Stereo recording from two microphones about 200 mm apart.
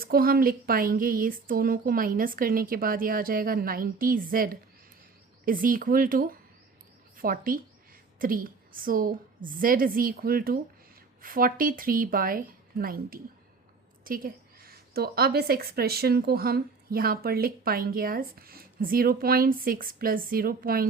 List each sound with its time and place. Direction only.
0.0 s a woman's voice: 45° right (ahead or behind)